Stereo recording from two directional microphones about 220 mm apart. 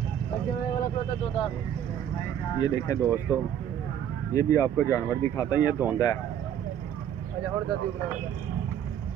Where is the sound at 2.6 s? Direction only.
15° left (ahead or behind).